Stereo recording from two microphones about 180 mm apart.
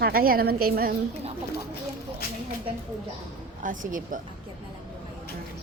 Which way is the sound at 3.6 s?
45° right (ahead or behind).